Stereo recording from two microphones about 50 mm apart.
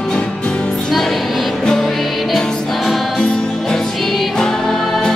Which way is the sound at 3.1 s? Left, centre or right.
Centre.